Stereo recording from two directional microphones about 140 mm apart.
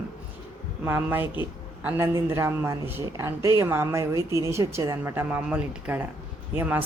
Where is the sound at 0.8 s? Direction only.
15° right (ahead or behind).